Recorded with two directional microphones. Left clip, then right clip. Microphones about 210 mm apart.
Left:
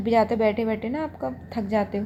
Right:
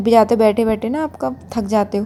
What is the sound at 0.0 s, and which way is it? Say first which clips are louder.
A woman's voice: right 8 dB; 45° right (ahead or behind).